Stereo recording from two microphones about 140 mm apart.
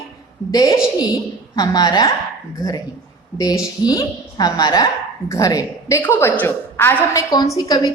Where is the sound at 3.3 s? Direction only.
25° left (ahead or behind).